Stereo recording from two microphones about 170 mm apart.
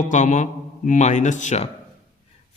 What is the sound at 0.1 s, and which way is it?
A man's voice, 45° left (ahead or behind).